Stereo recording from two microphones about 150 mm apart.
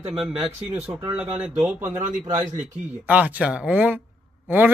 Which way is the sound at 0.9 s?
10° right (ahead or behind).